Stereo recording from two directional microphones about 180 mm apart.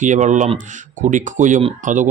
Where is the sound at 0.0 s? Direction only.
45° right (ahead or behind).